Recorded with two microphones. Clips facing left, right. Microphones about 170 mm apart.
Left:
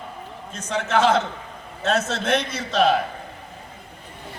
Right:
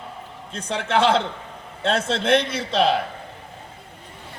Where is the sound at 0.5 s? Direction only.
30° right (ahead or behind).